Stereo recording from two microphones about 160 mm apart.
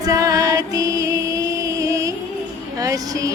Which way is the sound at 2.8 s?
20° right (ahead or behind).